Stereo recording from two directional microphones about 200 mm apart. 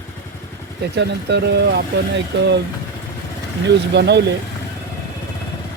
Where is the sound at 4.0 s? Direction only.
55° right (ahead or behind).